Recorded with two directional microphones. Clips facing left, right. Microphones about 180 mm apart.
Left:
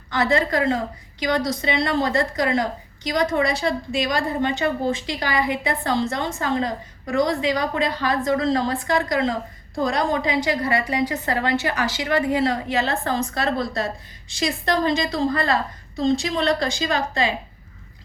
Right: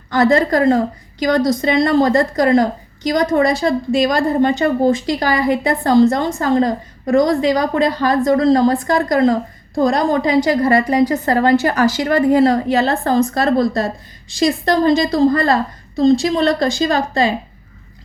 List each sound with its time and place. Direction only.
0.1 s a woman's voice: 40° right (ahead or behind)